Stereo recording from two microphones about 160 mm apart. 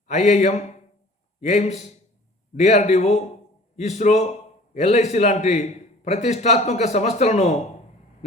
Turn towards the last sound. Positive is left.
turn(degrees=45)  # may be behind; listen again after turning